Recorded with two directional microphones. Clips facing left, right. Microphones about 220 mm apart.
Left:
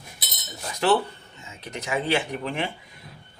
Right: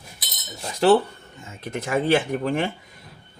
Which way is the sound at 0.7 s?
35° right (ahead or behind).